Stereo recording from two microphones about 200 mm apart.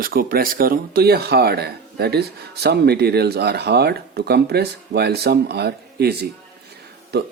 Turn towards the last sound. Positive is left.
turn(degrees=-55)  # may be behind; listen again after turning